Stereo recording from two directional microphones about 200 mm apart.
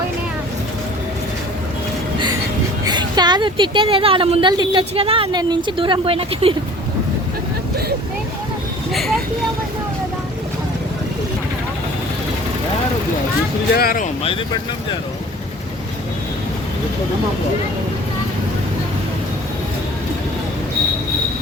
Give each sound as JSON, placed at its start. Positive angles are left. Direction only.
{"t": 2.8, "sound": "a woman's voice", "side_deg": -20}
{"t": 8.9, "sound": "vehicle", "side_deg": 0}
{"t": 13.7, "sound": "speech", "side_deg": 45}